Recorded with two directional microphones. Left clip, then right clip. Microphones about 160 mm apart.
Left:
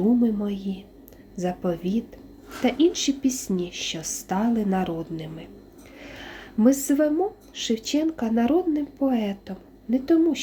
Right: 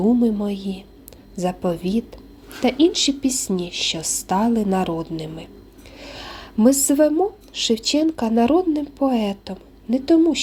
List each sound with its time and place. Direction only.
0.2 s speech: 25° right (ahead or behind)
6.0 s a sound: 30° right (ahead or behind)
7.5 s speech: 30° right (ahead or behind)